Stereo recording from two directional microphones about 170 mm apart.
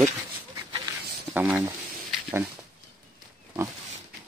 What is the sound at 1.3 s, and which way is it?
Speech, 10° right (ahead or behind).